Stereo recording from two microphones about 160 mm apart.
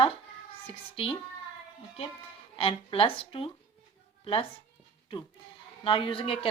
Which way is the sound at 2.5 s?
35° left (ahead or behind).